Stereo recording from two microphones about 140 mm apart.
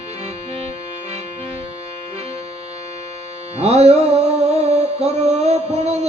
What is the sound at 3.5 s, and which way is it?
Music, 50° right (ahead or behind).